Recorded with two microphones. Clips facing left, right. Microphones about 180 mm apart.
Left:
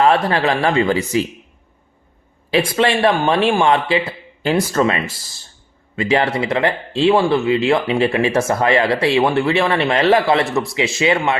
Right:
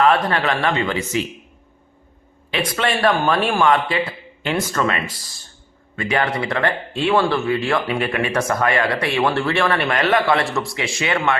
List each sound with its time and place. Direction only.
0.0 s speech: 30° left (ahead or behind)
2.5 s speech: 30° left (ahead or behind)